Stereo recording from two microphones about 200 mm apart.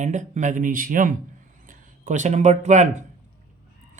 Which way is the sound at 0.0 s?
40° right (ahead or behind).